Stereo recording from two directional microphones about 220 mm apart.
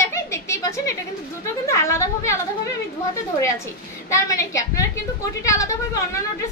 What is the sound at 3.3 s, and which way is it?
A woman's voice, 15° left (ahead or behind).